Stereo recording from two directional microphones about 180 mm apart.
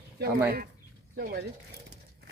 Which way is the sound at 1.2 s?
55° right (ahead or behind).